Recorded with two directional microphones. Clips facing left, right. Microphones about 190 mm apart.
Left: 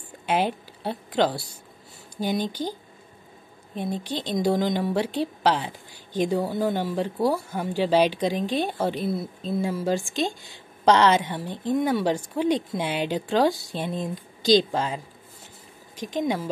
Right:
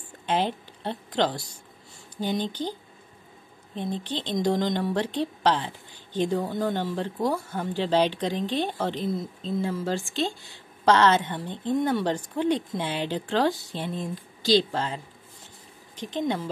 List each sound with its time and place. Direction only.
0.3 s a woman's voice: 10° left (ahead or behind)
3.7 s a woman's voice: 10° left (ahead or behind)
16.0 s a woman's voice: 10° left (ahead or behind)